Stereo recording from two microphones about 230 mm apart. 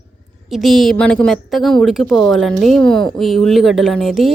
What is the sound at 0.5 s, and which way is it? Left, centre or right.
A woman's voice, centre.